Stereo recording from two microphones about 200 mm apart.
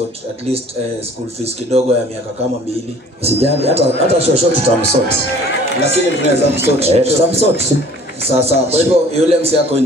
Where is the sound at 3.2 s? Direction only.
30° right (ahead or behind).